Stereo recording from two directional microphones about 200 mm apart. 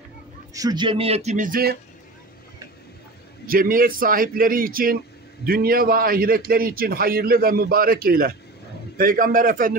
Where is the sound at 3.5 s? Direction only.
45° right (ahead or behind).